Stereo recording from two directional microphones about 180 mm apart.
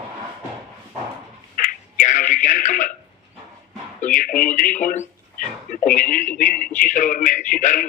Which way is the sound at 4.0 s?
45° left (ahead or behind).